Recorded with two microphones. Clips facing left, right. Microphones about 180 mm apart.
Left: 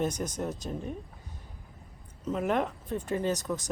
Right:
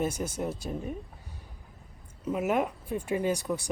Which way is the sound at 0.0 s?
10° right (ahead or behind).